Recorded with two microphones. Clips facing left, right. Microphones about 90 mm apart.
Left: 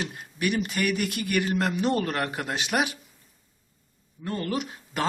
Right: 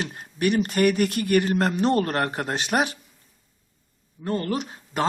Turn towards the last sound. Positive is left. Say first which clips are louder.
# right 3 dB
turn(degrees=-30)  # may be behind; listen again after turning